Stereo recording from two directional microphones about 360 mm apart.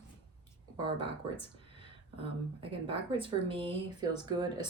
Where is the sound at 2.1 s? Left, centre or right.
Centre.